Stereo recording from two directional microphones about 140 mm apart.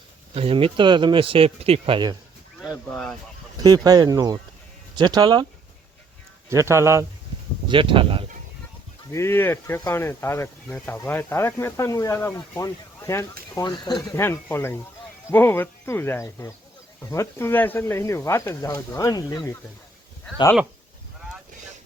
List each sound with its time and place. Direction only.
0.3 s speech: 40° right (ahead or behind)
2.9 s speech: 5° left (ahead or behind)
3.6 s speech: 30° right (ahead or behind)
6.5 s speech: 20° right (ahead or behind)
7.7 s speech: 35° right (ahead or behind)
9.1 s speech: 15° left (ahead or behind)
14.5 s speech: 15° left (ahead or behind)